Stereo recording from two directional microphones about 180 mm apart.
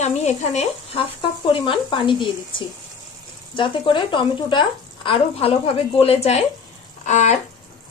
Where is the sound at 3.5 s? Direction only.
30° left (ahead or behind).